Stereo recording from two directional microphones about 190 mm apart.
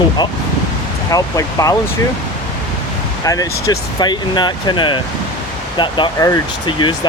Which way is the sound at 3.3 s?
20° left (ahead or behind).